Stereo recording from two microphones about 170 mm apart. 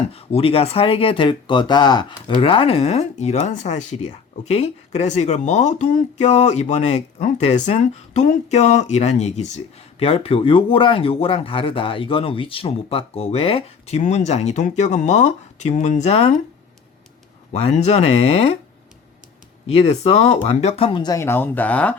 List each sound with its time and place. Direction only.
0.1 s speech: 35° left (ahead or behind)
17.5 s speech: 40° left (ahead or behind)
19.6 s speech: 40° left (ahead or behind); by 21.9 s 10° left (ahead or behind)